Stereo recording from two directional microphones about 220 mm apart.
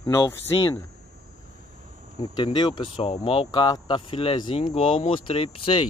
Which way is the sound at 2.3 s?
20° left (ahead or behind).